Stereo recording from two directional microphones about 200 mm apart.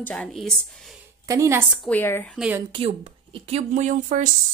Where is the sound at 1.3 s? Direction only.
15° right (ahead or behind).